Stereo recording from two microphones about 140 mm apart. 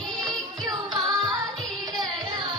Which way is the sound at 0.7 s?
25° right (ahead or behind).